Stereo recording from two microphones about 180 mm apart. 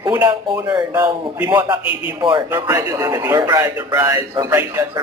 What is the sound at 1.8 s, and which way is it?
Speech, 30° left (ahead or behind).